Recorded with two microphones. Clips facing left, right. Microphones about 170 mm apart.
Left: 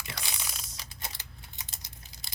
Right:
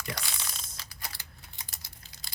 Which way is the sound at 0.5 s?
10° left (ahead or behind).